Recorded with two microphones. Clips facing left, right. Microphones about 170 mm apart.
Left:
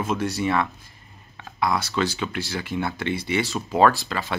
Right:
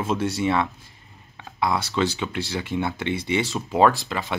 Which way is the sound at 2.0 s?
20° right (ahead or behind).